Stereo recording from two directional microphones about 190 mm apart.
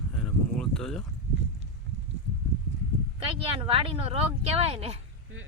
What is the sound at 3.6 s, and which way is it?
Speech, 30° right (ahead or behind).